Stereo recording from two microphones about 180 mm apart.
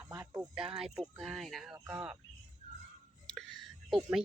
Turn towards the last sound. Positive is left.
turn(degrees=0)  # may be behind; listen again after turning